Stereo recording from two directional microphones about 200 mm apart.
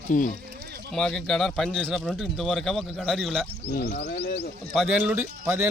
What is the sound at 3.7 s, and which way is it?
Speech, 55° left (ahead or behind).